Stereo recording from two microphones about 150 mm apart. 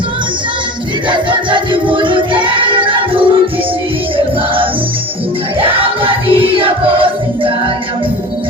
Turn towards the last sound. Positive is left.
turn(degrees=-35)  # may be behind; listen again after turning